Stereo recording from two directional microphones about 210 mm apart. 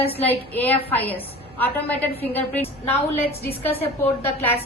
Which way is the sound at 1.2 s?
10° left (ahead or behind).